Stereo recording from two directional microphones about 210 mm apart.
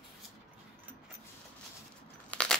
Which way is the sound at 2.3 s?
5° left (ahead or behind).